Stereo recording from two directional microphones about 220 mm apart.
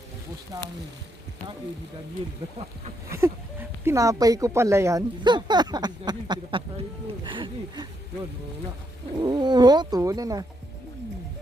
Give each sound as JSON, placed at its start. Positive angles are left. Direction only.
{"t": 0.5, "sound": "speech", "side_deg": -15}
{"t": 3.1, "sound": "speech", "side_deg": -10}
{"t": 9.1, "sound": "speech", "side_deg": -20}